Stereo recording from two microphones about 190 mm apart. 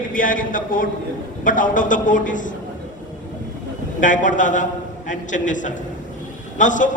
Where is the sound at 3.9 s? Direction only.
40° left (ahead or behind).